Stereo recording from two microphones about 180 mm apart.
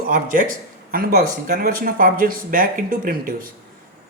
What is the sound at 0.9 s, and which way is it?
Speech, 55° right (ahead or behind).